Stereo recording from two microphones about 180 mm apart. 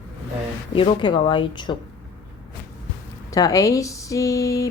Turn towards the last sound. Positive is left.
turn(degrees=20)  # may be behind; listen again after turning